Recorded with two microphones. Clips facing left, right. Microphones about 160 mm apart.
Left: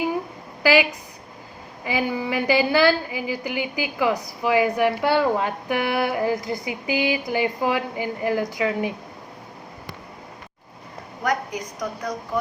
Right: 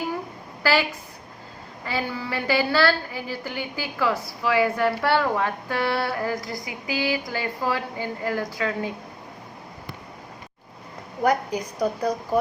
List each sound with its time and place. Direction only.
0.6 s a woman's voice: 15° left (ahead or behind)
11.2 s a woman's voice: 30° right (ahead or behind)